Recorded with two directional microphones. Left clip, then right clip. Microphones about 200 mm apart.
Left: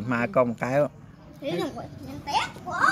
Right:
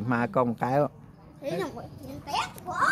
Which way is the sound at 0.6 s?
15° right (ahead or behind).